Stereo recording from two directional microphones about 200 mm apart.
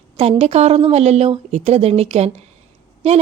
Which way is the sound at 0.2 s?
30° right (ahead or behind).